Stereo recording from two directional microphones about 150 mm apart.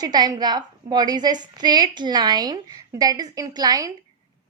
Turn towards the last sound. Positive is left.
turn(degrees=-25)  # may be behind; listen again after turning